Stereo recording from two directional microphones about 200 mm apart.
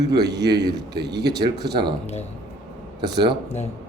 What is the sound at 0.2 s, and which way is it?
Speech, 55° right (ahead or behind).